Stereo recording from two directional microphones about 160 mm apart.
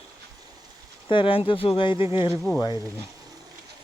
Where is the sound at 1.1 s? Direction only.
35° left (ahead or behind).